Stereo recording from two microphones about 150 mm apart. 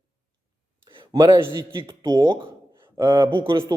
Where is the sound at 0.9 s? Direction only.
25° right (ahead or behind).